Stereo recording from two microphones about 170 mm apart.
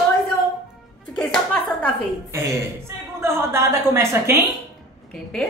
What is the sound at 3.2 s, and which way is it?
A woman's voice, 15° right (ahead or behind).